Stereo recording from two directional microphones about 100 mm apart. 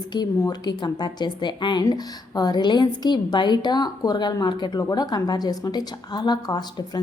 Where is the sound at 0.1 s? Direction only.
45° left (ahead or behind).